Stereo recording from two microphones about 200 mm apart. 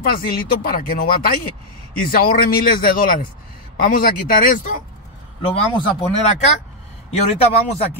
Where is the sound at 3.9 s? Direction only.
40° left (ahead or behind).